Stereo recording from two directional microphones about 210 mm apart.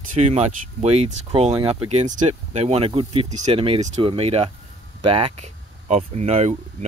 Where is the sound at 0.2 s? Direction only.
30° right (ahead or behind).